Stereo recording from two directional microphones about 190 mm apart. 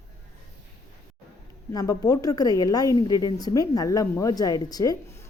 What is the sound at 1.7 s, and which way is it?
A woman's voice, 20° left (ahead or behind).